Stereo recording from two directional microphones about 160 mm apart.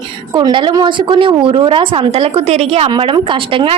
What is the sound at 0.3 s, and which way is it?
A woman's voice, 30° right (ahead or behind).